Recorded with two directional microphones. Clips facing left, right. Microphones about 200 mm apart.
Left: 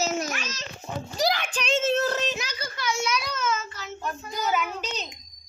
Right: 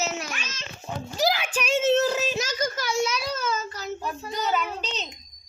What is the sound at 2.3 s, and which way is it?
Child singing, 45° right (ahead or behind).